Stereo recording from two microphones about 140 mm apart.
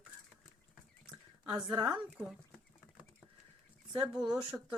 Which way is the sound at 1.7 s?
30° right (ahead or behind).